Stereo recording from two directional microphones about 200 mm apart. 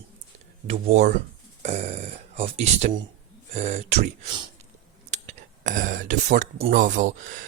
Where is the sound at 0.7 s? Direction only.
35° right (ahead or behind).